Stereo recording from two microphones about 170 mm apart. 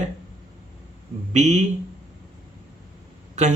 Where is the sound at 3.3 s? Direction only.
40° right (ahead or behind).